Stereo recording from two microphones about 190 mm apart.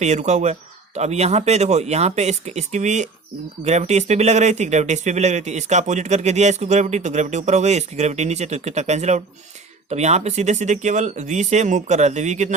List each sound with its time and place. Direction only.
0.0 s speech: 35° right (ahead or behind)